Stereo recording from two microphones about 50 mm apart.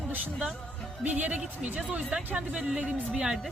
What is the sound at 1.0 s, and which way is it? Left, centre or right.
Music, right.